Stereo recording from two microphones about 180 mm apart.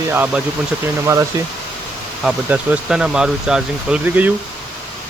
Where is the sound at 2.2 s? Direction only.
5° right (ahead or behind).